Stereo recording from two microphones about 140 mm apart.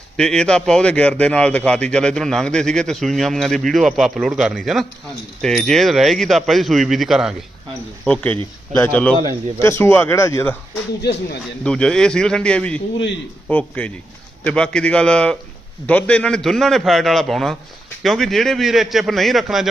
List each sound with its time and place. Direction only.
0.2 s a man's voice: 5° left (ahead or behind)
8.0 s a man's voice: 10° left (ahead or behind)
11.6 s a man's voice: 5° left (ahead or behind)